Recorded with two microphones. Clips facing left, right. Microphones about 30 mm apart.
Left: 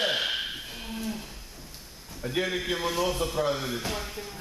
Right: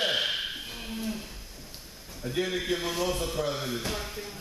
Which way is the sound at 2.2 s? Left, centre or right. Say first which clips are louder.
Left 1 dB; centre.